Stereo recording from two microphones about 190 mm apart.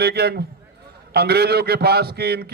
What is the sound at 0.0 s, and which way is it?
Speech, 55° right (ahead or behind).